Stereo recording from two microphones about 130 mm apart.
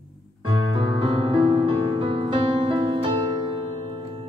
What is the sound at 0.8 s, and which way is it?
Music, 40° right (ahead or behind).